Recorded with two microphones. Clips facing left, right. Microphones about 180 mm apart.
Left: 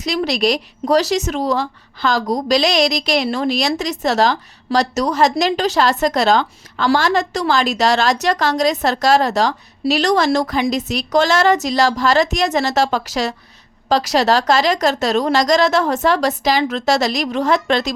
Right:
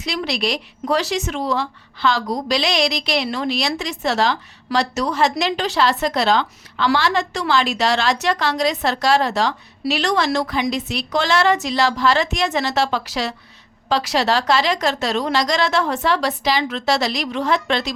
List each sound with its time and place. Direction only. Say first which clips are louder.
0.0 s a woman's voice: left 5 dB; 40° left (ahead or behind)